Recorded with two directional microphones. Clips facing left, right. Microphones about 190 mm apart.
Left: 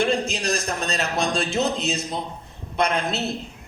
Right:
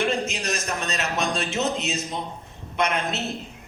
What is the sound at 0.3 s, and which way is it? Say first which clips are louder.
A man's voice: left 3 dB; 35° left (ahead or behind).